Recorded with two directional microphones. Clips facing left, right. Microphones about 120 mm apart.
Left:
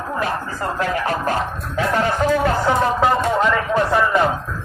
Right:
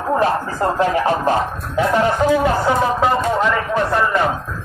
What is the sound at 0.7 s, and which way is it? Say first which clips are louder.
Speech: right 4 dB; 25° right (ahead or behind).